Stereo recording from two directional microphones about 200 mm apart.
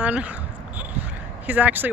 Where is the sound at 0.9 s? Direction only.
10° right (ahead or behind).